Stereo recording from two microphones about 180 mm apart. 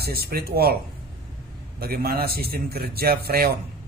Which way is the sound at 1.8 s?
55° right (ahead or behind).